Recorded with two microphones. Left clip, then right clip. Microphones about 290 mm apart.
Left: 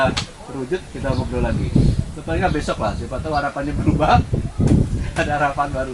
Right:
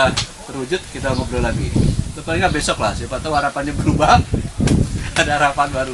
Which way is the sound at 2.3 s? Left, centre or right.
Centre.